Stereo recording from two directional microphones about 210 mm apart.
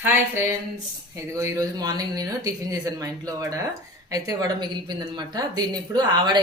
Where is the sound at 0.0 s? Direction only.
10° right (ahead or behind).